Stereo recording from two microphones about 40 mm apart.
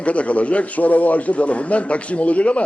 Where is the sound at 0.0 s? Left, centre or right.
Left.